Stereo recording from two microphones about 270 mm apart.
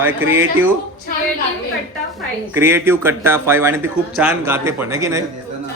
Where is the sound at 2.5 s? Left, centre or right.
Centre.